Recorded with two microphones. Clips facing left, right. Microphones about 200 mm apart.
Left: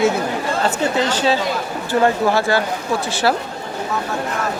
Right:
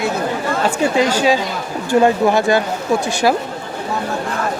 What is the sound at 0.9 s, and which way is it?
Speech, 10° right (ahead or behind).